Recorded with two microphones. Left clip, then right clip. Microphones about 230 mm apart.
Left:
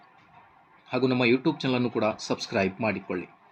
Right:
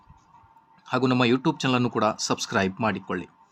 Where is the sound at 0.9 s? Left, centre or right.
Right.